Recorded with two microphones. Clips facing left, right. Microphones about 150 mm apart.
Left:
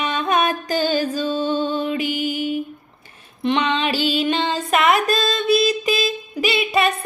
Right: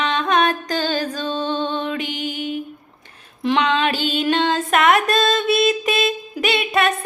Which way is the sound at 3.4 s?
Centre (ahead or behind).